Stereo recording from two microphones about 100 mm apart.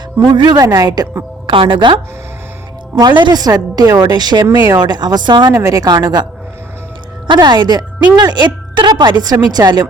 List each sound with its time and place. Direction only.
0.2 s a woman's voice: 45° right (ahead or behind)
1.5 s a woman's voice: 60° right (ahead or behind); by 6.2 s 45° right (ahead or behind)
7.3 s a woman's voice: 45° right (ahead or behind)